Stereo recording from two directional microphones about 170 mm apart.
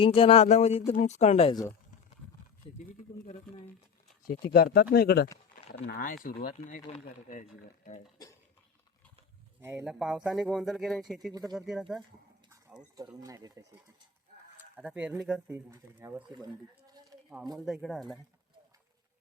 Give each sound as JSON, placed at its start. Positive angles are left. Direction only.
{"t": 0.0, "sound": "speech", "side_deg": 35}
{"t": 4.5, "sound": "speech", "side_deg": 65}
{"t": 6.5, "sound": "speech", "side_deg": 45}
{"t": 9.6, "sound": "speech", "side_deg": -10}
{"t": 13.0, "sound": "speech", "side_deg": -20}
{"t": 14.8, "sound": "speech", "side_deg": -5}
{"t": 16.2, "sound": "speech", "side_deg": -25}
{"t": 17.7, "sound": "speech", "side_deg": 0}